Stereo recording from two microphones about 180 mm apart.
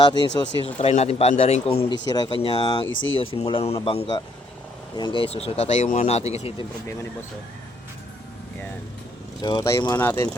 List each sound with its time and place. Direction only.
0.0 s speech: 25° left (ahead or behind)
0.6 s speech: 35° left (ahead or behind)
2.8 s speech: 90° left
3.2 s speech: 30° left (ahead or behind)
9.4 s speech: 20° left (ahead or behind)